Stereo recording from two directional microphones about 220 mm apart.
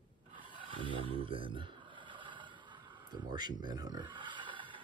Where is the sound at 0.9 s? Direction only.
25° right (ahead or behind).